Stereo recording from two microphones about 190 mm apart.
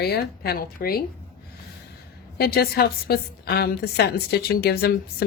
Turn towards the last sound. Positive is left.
turn(degrees=55)  # may be behind; listen again after turning